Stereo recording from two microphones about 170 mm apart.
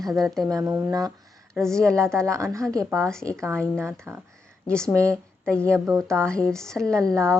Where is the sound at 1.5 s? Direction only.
5° left (ahead or behind).